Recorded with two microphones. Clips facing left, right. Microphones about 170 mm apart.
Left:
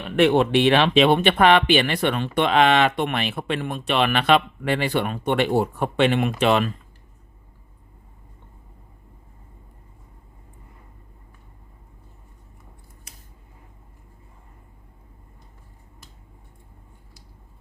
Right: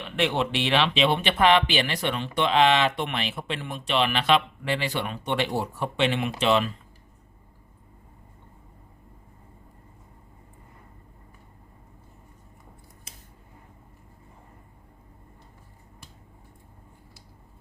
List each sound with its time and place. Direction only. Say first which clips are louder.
0.0 s speech: left 8 dB; 50° left (ahead or behind)